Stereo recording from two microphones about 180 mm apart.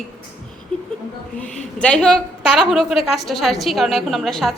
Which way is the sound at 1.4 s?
5° left (ahead or behind).